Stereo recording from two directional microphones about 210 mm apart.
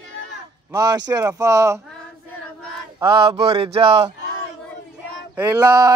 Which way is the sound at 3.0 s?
25° right (ahead or behind).